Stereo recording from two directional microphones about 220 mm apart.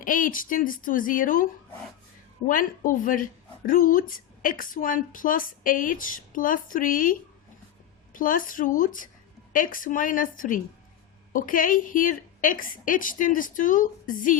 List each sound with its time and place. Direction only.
0.0 s a woman's voice: 40° left (ahead or behind)
2.5 s a woman's voice: 40° left (ahead or behind)